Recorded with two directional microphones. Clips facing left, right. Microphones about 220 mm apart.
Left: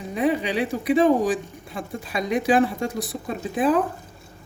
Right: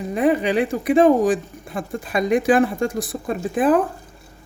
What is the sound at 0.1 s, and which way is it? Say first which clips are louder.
Speech: right 4 dB; 50° right (ahead or behind).